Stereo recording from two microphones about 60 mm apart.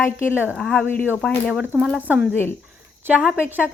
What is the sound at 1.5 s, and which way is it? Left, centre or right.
Speech, centre.